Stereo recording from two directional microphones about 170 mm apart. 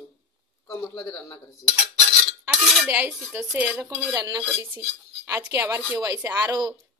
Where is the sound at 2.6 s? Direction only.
5° right (ahead or behind).